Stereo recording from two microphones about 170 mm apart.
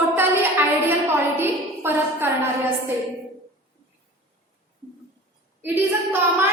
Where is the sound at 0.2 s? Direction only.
15° right (ahead or behind).